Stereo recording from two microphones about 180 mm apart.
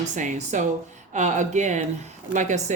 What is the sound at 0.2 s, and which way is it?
A woman's voice, 45° right (ahead or behind).